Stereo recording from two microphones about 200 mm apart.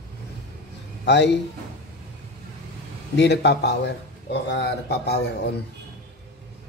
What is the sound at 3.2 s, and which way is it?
Speech, 60° left (ahead or behind).